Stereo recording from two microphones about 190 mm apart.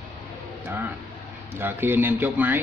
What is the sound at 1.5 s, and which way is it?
A man's voice, 10° right (ahead or behind).